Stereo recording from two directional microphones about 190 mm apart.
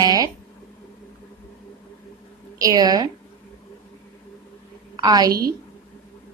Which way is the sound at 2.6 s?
20° right (ahead or behind).